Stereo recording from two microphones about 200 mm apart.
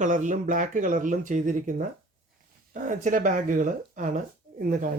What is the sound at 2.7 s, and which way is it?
Speech, 40° right (ahead or behind).